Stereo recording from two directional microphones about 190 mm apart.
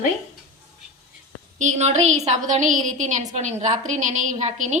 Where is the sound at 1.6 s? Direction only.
35° right (ahead or behind).